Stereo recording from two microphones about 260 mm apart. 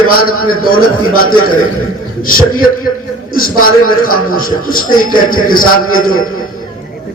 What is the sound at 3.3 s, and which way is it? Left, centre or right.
A man's voice, left.